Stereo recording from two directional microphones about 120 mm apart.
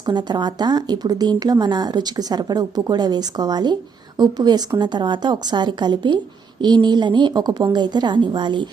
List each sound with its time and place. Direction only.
0.0 s speech: 35° right (ahead or behind)